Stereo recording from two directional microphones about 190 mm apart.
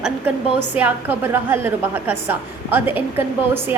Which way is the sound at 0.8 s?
10° right (ahead or behind).